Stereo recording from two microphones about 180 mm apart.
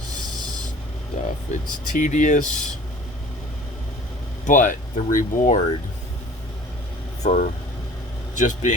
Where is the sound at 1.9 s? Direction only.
45° left (ahead or behind).